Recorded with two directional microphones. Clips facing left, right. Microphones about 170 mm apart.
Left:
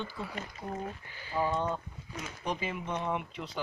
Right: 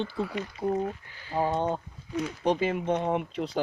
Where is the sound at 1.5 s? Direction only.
35° right (ahead or behind).